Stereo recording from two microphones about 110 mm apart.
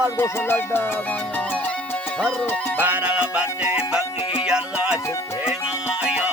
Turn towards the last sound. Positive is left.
turn(degrees=-10)  # may be behind; listen again after turning